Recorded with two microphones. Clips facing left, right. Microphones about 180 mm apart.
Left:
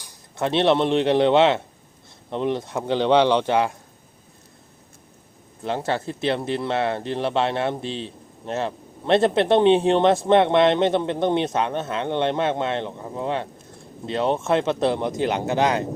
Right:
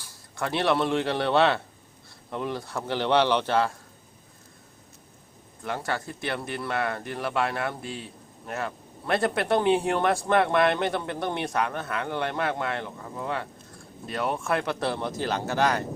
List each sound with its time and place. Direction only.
0.0 s speech: 20° left (ahead or behind)
5.6 s speech: 25° left (ahead or behind)